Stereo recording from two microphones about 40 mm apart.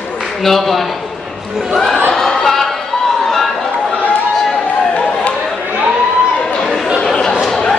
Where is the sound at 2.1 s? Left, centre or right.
Centre.